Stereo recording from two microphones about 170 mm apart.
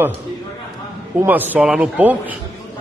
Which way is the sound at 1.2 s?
10° right (ahead or behind).